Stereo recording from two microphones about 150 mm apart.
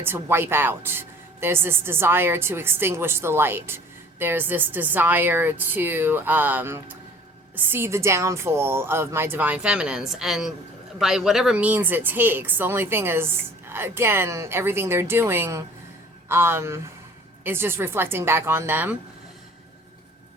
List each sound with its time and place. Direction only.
0.0 s a woman's voice: 15° right (ahead or behind)